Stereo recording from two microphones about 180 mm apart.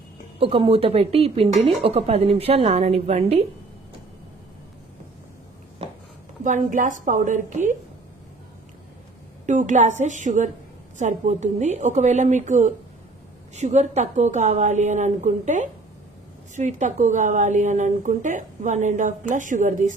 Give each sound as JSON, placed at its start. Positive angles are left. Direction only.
{"t": 0.4, "sound": "speech", "side_deg": -30}
{"t": 6.4, "sound": "speech", "side_deg": -45}
{"t": 9.5, "sound": "speech", "side_deg": -45}